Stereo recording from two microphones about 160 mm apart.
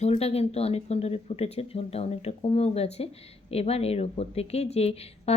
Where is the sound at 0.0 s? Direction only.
40° left (ahead or behind).